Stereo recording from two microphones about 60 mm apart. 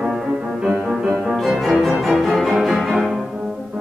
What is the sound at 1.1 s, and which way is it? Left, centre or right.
Music, centre.